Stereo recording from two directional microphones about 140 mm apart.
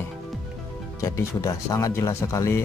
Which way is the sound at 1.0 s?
20° left (ahead or behind).